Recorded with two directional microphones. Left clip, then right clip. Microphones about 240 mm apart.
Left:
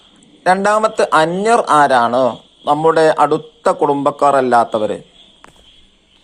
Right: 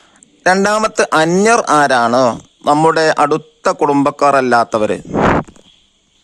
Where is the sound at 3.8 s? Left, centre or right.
Right.